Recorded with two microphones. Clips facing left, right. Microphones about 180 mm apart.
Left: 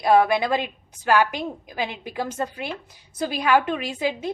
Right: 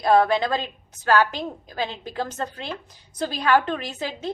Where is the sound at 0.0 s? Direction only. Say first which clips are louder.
Even; 10° left (ahead or behind).